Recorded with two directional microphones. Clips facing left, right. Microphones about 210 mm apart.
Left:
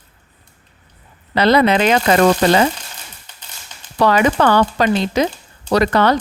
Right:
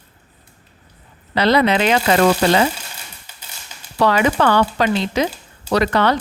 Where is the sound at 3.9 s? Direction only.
40° left (ahead or behind).